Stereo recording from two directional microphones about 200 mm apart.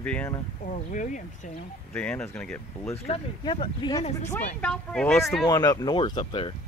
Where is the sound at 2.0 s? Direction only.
5° left (ahead or behind).